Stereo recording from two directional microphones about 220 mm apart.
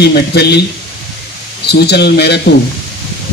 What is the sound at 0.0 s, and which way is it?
Speech, 50° left (ahead or behind).